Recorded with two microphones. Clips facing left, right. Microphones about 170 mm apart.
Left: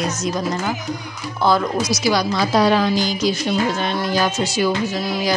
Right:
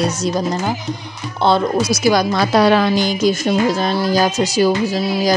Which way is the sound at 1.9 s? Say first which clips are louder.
Right 3 dB; 50° right (ahead or behind).